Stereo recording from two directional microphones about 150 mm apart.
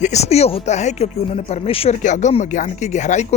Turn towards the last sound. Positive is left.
turn(degrees=50)  # may be behind; listen again after turning